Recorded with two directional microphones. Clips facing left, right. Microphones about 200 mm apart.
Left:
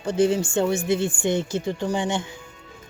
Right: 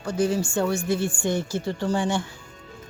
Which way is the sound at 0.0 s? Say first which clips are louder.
Left 3 dB; 25° left (ahead or behind).